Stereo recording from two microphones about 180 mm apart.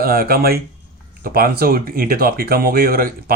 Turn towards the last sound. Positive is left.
turn(degrees=-55)  # may be behind; listen again after turning